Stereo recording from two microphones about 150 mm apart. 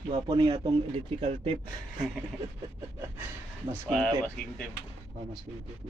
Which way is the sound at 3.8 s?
5° left (ahead or behind).